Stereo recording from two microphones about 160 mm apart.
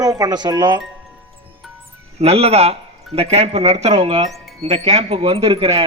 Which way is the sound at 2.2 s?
40° right (ahead or behind).